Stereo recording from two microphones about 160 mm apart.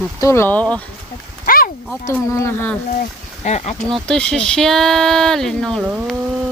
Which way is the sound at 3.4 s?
45° left (ahead or behind).